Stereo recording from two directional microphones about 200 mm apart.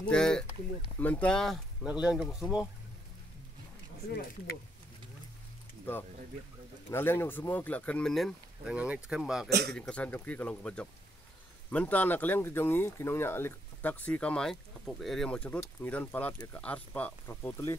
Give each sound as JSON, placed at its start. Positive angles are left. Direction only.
{"t": 0.0, "sound": "speech", "side_deg": 5}
{"t": 6.9, "sound": "speech", "side_deg": 10}
{"t": 9.5, "sound": "a man's voice", "side_deg": -55}
{"t": 9.8, "sound": "speech", "side_deg": 5}